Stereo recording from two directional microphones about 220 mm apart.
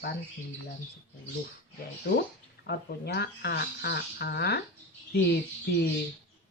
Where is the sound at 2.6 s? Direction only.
45° left (ahead or behind).